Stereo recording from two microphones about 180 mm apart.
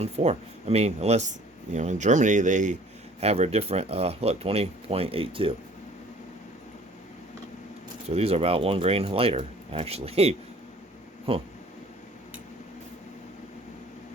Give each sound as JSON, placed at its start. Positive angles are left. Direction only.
{"t": 0.0, "sound": "speech", "side_deg": -35}
{"t": 8.0, "sound": "speech", "side_deg": -35}